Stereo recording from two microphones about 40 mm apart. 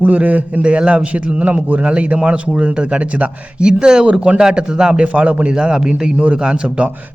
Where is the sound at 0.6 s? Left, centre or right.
Right.